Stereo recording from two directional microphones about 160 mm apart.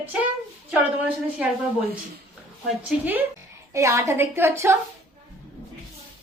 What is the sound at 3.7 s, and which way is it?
A woman's voice, 20° right (ahead or behind).